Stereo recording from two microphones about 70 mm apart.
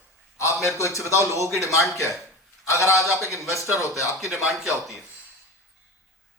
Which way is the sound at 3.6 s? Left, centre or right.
Right.